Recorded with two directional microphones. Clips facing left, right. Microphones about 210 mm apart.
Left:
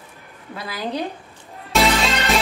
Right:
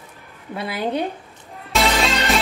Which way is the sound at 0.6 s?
25° right (ahead or behind).